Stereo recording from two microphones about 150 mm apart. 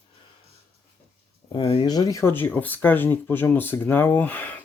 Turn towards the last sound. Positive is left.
turn(degrees=10)  # may be behind; listen again after turning